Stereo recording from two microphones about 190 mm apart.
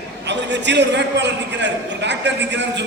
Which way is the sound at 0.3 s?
65° right (ahead or behind).